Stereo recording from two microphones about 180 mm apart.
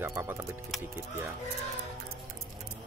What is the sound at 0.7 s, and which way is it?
Speech, centre (ahead or behind).